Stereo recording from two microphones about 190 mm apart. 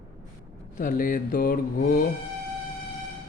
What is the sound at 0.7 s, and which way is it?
Mantra, 45° left (ahead or behind).